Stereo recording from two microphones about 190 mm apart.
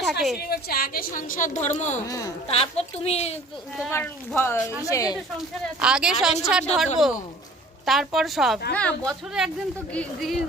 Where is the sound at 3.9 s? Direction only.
10° left (ahead or behind).